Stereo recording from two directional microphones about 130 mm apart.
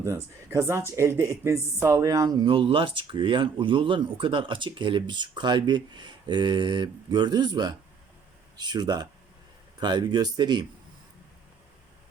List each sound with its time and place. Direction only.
0.0 s speech: 20° right (ahead or behind)